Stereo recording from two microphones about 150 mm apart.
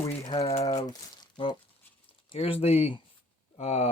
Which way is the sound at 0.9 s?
25° left (ahead or behind).